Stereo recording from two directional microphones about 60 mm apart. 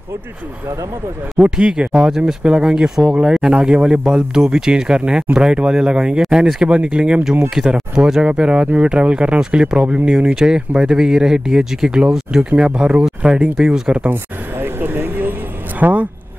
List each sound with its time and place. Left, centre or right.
1.4 s speech: centre
14.1 s vehicle: right
15.8 s speech: right